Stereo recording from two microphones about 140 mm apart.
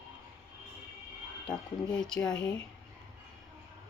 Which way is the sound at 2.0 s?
5° left (ahead or behind).